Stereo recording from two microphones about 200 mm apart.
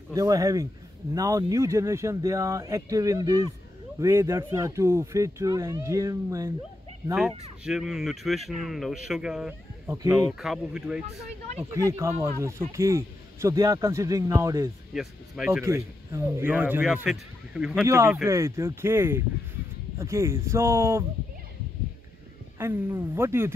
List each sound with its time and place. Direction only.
0.1 s speech: 15° right (ahead or behind)
7.6 s speech: centre (ahead or behind)
11.7 s speech: 15° right (ahead or behind)
15.0 s speech: 5° right (ahead or behind)
17.8 s speech: 15° right (ahead or behind)
22.6 s speech: 10° right (ahead or behind)